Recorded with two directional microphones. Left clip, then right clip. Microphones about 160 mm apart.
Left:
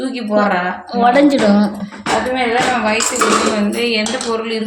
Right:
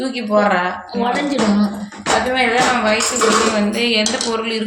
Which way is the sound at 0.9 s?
90° left.